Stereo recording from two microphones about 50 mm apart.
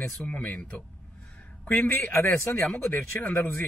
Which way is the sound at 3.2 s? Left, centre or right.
Left.